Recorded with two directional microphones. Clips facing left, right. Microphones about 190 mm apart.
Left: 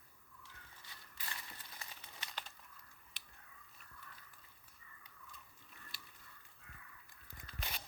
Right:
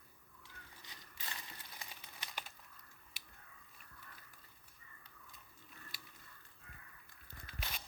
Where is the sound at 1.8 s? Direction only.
10° right (ahead or behind).